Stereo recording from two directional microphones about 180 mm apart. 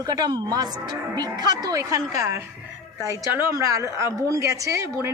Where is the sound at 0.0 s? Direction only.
20° right (ahead or behind).